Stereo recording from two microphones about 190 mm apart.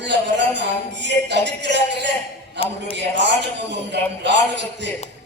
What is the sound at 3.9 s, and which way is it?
Music, 65° right (ahead or behind).